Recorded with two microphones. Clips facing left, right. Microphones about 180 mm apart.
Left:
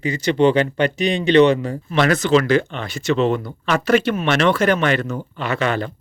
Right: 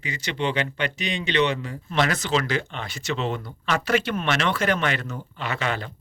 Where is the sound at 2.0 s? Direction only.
55° left (ahead or behind).